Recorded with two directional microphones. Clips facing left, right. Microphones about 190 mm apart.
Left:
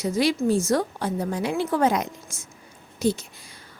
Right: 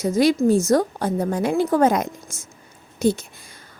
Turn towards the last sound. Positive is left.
turn(degrees=-50)  # may be behind; listen again after turning